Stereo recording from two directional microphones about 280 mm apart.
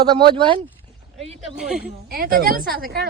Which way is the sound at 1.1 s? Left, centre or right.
Right.